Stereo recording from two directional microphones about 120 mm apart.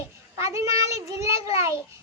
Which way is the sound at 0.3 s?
25° right (ahead or behind).